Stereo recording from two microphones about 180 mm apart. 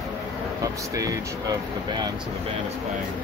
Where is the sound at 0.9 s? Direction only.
20° right (ahead or behind).